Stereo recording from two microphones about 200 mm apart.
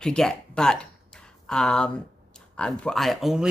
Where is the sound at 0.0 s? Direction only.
5° left (ahead or behind).